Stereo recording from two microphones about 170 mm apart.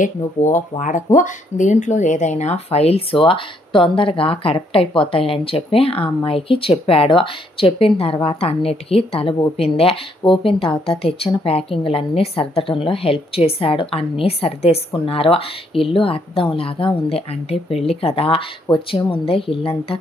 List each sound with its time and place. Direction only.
0.0 s speech: 50° left (ahead or behind); by 20.0 s 35° left (ahead or behind)